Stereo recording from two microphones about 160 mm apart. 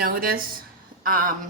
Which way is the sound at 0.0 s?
70° right (ahead or behind).